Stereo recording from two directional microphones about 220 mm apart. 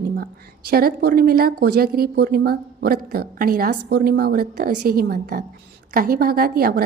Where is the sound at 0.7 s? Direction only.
45° right (ahead or behind).